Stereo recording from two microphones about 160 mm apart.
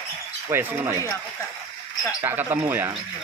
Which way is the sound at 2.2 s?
10° right (ahead or behind).